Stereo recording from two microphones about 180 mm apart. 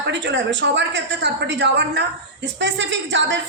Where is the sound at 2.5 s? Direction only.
85° right.